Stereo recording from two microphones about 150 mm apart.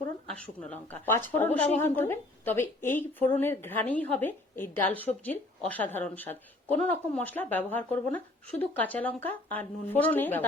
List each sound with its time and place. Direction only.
0.3 s speech: 10° left (ahead or behind)